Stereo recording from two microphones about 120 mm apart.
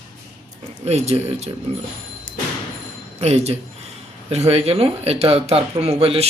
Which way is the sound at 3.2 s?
60° right (ahead or behind).